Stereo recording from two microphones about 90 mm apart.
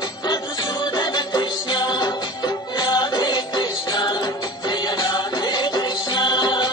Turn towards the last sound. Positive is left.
turn(degrees=55)  # may be behind; listen again after turning